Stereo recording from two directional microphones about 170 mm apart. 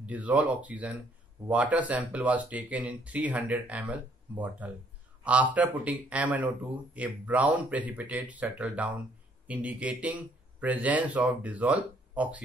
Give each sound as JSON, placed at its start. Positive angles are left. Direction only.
{"t": 0.0, "sound": "speech", "side_deg": -10}